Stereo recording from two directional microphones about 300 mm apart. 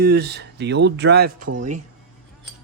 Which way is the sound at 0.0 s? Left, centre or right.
Right.